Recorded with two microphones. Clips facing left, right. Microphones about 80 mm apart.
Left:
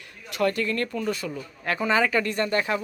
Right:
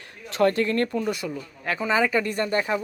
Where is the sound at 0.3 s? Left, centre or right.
Right.